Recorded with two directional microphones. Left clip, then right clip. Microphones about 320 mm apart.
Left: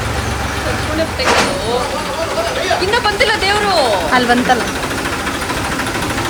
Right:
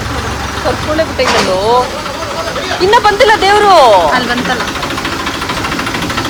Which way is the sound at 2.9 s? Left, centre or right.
Right.